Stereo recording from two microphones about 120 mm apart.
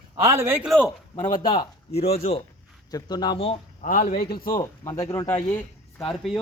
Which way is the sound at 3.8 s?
90° left.